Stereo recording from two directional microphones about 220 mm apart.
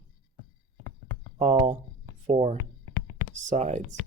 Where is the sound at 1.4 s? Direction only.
30° right (ahead or behind).